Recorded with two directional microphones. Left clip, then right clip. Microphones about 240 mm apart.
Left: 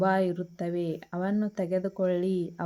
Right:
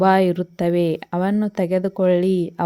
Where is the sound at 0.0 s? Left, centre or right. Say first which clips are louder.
Right 10 dB; right.